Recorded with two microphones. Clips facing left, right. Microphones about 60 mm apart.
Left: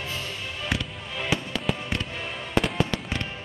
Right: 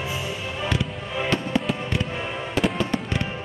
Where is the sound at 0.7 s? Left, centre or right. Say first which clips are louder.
Right 5 dB; centre.